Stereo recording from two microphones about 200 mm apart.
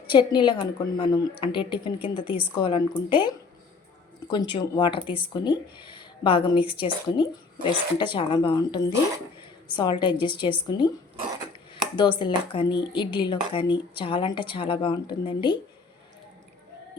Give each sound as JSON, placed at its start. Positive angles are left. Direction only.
{"t": 0.1, "sound": "speech", "side_deg": 25}
{"t": 12.2, "sound": "speech", "side_deg": 25}